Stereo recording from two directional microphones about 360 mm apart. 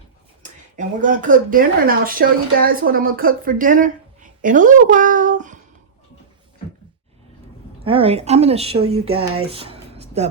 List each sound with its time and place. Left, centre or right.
0.8 s speech: right
7.9 s a woman's voice: centre
8.8 s speech: right
9.0 s speech: centre